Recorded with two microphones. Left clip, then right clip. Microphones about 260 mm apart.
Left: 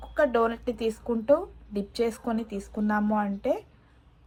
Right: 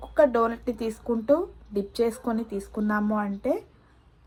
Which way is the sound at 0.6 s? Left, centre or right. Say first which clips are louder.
Left 1 dB; left.